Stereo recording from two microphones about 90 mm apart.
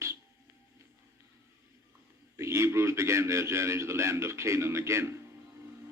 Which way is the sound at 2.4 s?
30° right (ahead or behind).